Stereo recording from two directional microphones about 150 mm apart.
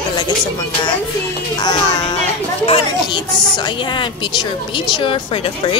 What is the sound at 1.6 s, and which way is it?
Speech, 30° left (ahead or behind).